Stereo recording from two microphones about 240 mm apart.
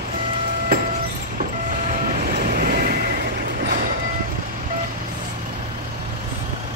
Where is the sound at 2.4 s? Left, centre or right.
Right.